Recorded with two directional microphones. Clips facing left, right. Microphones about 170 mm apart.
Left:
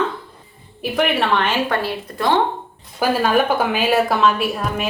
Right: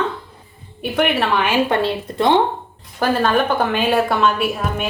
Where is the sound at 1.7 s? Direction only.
20° right (ahead or behind).